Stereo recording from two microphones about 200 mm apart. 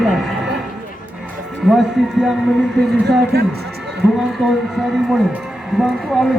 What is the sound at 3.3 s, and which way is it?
Speech, 50° right (ahead or behind).